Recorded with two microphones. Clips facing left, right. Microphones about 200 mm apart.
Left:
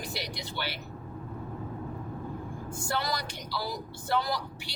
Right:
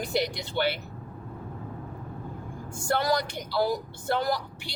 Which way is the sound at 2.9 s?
55° right (ahead or behind).